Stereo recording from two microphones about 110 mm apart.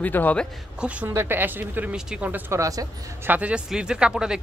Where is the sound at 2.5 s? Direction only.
30° right (ahead or behind).